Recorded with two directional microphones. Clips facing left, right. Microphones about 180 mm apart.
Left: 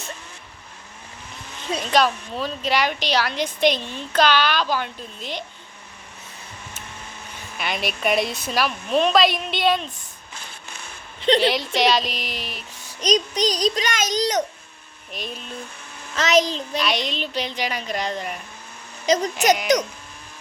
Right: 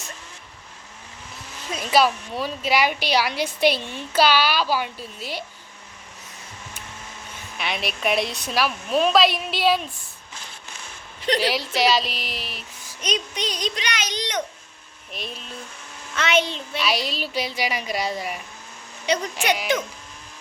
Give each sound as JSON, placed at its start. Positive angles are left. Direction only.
{"t": 1.8, "sound": "a woman's voice", "side_deg": -10}
{"t": 7.6, "sound": "a woman's voice", "side_deg": 0}
{"t": 11.3, "sound": "a woman's voice", "side_deg": -5}
{"t": 13.0, "sound": "a child's voice", "side_deg": 35}
{"t": 15.1, "sound": "a woman's voice", "side_deg": 0}
{"t": 16.1, "sound": "a child's voice", "side_deg": 40}
{"t": 16.7, "sound": "a woman's voice", "side_deg": -5}
{"t": 19.0, "sound": "a child's voice", "side_deg": 40}